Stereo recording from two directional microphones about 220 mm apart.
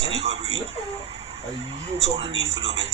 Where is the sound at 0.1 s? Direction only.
30° right (ahead or behind).